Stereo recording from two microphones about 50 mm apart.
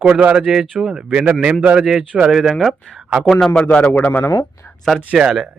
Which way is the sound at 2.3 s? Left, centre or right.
Centre.